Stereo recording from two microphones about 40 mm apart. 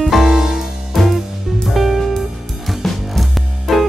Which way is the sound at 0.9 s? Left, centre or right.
Centre.